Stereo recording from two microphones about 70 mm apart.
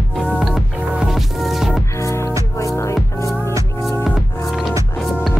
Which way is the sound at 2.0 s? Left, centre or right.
Left.